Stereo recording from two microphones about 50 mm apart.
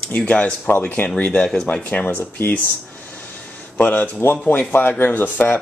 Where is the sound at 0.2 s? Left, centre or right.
Left.